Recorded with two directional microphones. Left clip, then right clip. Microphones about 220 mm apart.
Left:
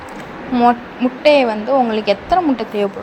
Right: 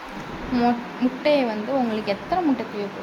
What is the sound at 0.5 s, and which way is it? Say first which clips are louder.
Speech: left 9 dB; 10° left (ahead or behind).